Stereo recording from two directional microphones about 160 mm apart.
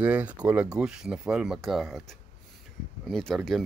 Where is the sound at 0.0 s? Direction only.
10° right (ahead or behind).